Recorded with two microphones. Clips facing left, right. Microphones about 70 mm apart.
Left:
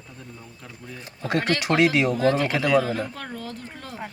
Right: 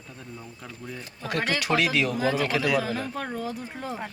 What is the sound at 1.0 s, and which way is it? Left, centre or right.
Speech, left.